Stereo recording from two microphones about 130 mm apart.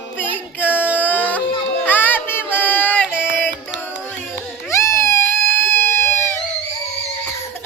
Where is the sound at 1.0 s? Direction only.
15° left (ahead or behind).